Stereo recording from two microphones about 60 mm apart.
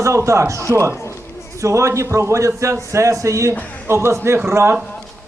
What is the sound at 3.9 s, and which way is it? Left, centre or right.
Speech, right.